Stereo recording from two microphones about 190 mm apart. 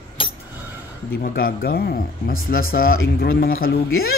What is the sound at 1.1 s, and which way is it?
Speech, 50° left (ahead or behind).